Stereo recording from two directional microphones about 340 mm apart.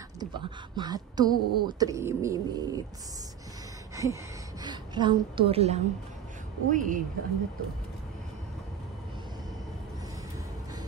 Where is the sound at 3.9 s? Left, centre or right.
Centre.